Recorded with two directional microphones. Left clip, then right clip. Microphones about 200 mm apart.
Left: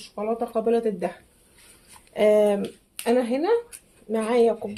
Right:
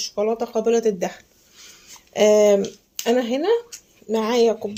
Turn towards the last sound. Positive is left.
turn(degrees=-45)  # may be behind; listen again after turning